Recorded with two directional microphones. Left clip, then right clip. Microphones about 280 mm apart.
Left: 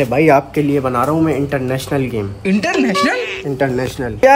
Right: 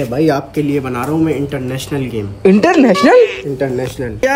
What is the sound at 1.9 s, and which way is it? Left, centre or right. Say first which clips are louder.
A man's voice: left 1 dB; centre.